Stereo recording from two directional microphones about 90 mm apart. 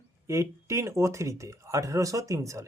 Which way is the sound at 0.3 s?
30° right (ahead or behind).